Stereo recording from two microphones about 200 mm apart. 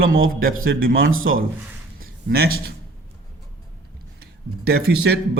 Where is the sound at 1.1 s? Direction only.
85° right.